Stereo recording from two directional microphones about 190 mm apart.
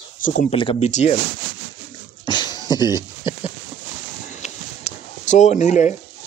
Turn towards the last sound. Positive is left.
turn(degrees=40)  # may be behind; listen again after turning